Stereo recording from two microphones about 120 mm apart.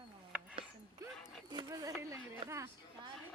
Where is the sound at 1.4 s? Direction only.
35° right (ahead or behind).